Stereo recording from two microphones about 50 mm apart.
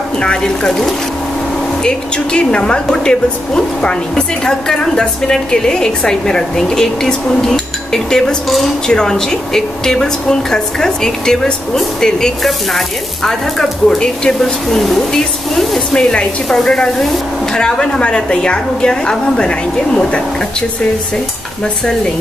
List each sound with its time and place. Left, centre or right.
0.2 s a woman's voice: centre
12.4 s sizzle: centre
13.8 s a woman's voice: centre
14.8 s sizzle: centre
15.9 s a woman's voice: centre